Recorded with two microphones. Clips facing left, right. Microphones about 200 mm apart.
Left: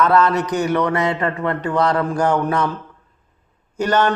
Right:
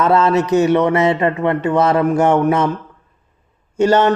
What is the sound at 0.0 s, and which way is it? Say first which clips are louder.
A man's voice: right 2 dB; 25° right (ahead or behind).